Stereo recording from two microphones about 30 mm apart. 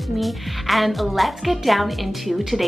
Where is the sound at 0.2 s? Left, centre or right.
Centre.